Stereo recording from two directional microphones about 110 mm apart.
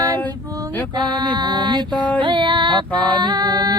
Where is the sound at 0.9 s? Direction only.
40° right (ahead or behind).